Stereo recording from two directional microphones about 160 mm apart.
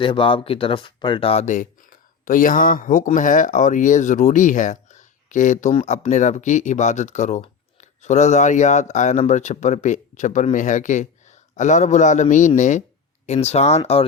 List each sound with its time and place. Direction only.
0.0 s speech: 30° left (ahead or behind)